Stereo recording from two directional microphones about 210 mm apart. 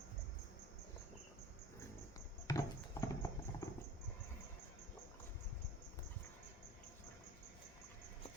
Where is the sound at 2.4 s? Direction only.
15° left (ahead or behind).